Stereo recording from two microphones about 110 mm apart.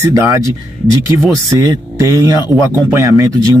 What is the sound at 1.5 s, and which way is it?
Speech, 30° right (ahead or behind).